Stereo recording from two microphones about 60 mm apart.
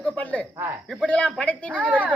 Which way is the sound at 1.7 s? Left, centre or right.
Right.